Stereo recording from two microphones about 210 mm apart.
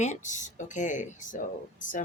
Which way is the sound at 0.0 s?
35° left (ahead or behind).